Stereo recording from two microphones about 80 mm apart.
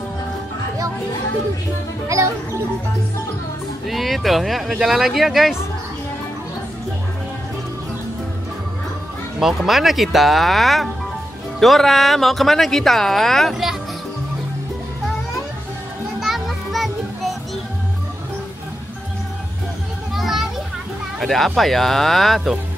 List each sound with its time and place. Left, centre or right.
2.0 s speech: right
3.8 s speech: centre
9.4 s speech: centre
16.2 s children playing: centre
20.2 s children playing: centre
21.2 s speech: centre